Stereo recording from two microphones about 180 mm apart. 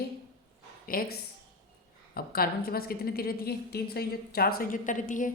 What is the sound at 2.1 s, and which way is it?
A woman's voice, 55° left (ahead or behind).